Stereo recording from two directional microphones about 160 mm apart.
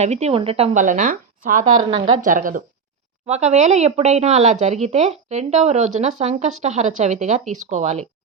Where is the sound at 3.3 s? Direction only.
45° right (ahead or behind).